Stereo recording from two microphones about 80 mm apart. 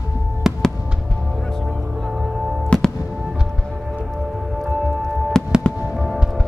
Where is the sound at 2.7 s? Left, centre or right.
Centre.